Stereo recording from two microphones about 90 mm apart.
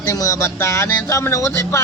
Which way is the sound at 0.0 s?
35° left (ahead or behind).